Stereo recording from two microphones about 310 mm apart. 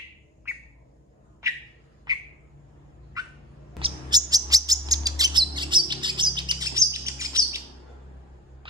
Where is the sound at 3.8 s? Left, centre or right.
Centre.